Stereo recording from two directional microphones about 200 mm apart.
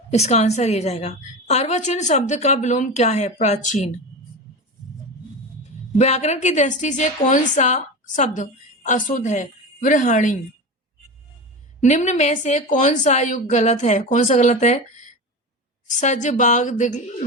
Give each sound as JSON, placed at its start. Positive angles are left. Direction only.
{"t": 0.1, "sound": "a woman's voice", "side_deg": 35}
{"t": 6.0, "sound": "a woman's voice", "side_deg": 35}
{"t": 11.8, "sound": "a woman's voice", "side_deg": 35}